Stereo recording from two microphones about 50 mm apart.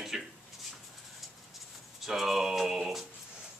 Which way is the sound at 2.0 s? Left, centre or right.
Centre.